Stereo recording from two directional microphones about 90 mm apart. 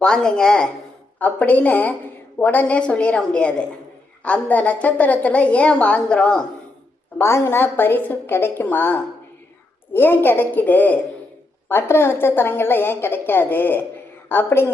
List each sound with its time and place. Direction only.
0.0 s a woman's voice: 5° left (ahead or behind)
7.2 s a woman's voice: 30° left (ahead or behind)